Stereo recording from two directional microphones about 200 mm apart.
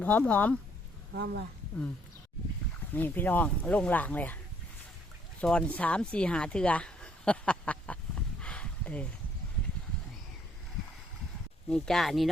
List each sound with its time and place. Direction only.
0.0 s speech: 5° left (ahead or behind)
1.1 s speech: 55° right (ahead or behind)
2.9 s speech: 10° left (ahead or behind)
5.4 s speech: 5° left (ahead or behind)
8.4 s a sound: 5° left (ahead or behind)
11.7 s speech: centre (ahead or behind)